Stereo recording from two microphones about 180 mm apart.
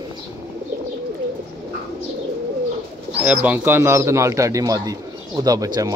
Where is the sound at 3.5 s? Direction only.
10° right (ahead or behind).